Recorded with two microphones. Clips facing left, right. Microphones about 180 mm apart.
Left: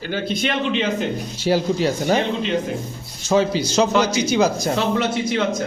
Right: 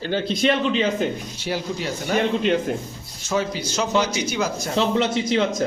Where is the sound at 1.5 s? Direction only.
35° left (ahead or behind).